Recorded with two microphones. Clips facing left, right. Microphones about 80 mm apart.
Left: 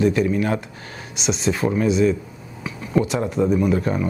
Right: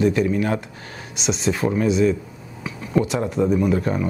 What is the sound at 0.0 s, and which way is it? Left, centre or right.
Speech, left.